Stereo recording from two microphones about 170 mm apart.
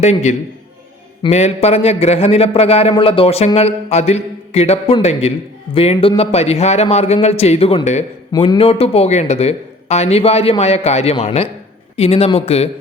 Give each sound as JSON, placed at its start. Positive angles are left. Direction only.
{"t": 0.0, "sound": "speech", "side_deg": 40}
{"t": 8.3, "sound": "speech", "side_deg": 25}